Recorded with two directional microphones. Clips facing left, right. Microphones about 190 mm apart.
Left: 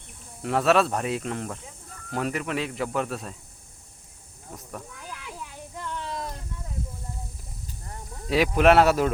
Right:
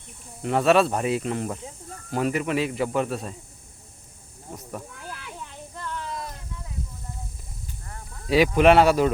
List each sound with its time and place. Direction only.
0.4 s speech: centre (ahead or behind)
5.0 s snake: 10° left (ahead or behind)
6.0 s a sound: 30° left (ahead or behind)
8.3 s speech: centre (ahead or behind)